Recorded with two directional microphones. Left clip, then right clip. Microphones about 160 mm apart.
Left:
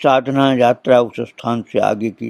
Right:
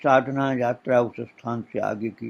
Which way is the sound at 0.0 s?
55° left (ahead or behind).